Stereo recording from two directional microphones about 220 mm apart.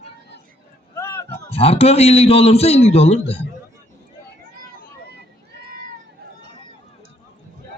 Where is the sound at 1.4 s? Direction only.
25° left (ahead or behind).